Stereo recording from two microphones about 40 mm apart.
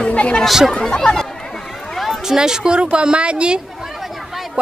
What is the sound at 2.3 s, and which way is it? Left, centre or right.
Speech, centre.